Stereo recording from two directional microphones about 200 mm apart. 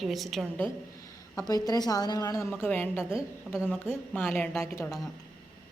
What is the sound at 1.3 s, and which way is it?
A woman's voice, 20° left (ahead or behind).